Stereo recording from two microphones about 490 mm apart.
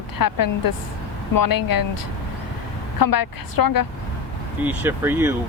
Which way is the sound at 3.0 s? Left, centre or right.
Left.